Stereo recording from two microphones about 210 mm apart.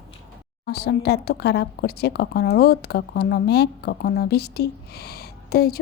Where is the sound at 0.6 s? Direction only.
50° left (ahead or behind).